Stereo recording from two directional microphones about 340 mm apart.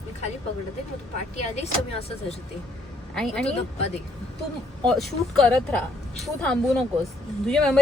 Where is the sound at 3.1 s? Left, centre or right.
Centre.